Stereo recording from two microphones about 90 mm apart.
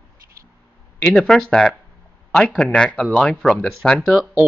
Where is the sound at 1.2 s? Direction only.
5° left (ahead or behind).